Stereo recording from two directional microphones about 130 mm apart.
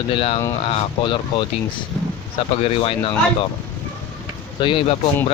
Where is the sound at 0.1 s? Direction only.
45° left (ahead or behind).